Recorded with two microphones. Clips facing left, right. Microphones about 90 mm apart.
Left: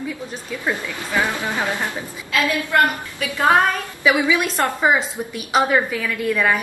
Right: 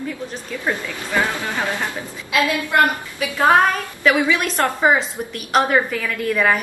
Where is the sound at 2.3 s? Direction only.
20° right (ahead or behind).